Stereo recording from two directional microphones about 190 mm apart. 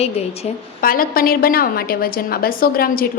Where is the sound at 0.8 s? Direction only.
50° left (ahead or behind).